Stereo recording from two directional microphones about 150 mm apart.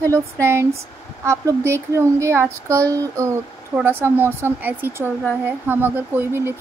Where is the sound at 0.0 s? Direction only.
20° right (ahead or behind).